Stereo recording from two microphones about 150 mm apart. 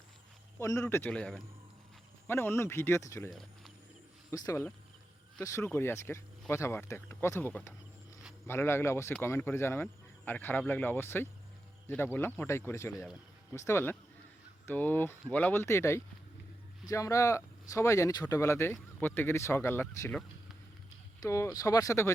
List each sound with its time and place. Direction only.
0.6 s speech: 20° left (ahead or behind)
3.2 s speech: centre (ahead or behind)
4.3 s speech: 20° left (ahead or behind)
21.2 s speech: 20° left (ahead or behind)